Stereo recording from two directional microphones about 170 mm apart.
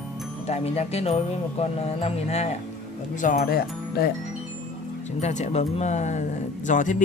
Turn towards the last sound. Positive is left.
turn(degrees=50)  # may be behind; listen again after turning